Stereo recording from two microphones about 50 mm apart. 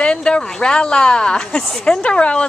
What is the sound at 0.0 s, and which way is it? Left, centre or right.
Speech, centre.